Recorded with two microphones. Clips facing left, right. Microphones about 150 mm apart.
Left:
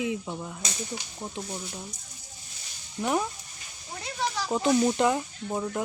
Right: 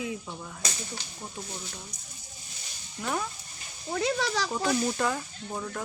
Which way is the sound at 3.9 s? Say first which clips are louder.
Right 4 dB; 90° right.